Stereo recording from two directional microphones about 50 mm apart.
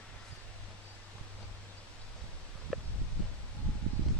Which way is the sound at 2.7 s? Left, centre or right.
Centre.